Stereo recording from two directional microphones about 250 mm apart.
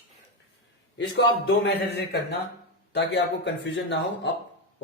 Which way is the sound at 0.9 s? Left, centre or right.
Left.